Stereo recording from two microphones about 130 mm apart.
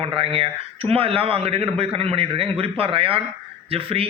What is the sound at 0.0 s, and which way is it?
A man's voice, 45° right (ahead or behind).